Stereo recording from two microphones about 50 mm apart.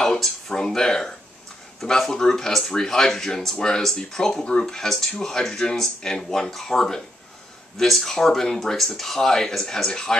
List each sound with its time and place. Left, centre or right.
0.0 s speech: centre
9.8 s speech: centre